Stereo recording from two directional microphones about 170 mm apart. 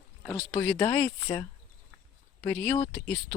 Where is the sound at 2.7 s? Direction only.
25° left (ahead or behind).